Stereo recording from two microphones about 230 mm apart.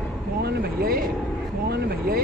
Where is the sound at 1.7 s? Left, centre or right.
Right.